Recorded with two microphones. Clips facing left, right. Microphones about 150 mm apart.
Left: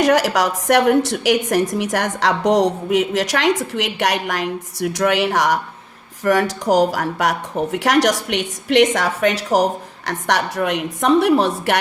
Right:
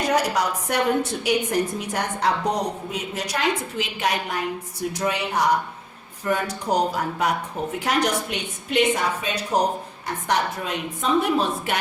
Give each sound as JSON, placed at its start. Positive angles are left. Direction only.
{"t": 0.0, "sound": "a woman's voice", "side_deg": 90}